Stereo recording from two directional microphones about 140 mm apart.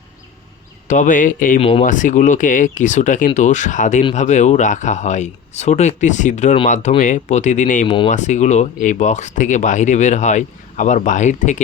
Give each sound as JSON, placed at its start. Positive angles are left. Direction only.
{"t": 0.9, "sound": "speech", "side_deg": 65}
{"t": 1.5, "sound": "speech", "side_deg": 45}
{"t": 1.8, "sound": "speech", "side_deg": 65}
{"t": 7.9, "sound": "speech", "side_deg": 40}
{"t": 8.1, "sound": "speech", "side_deg": 60}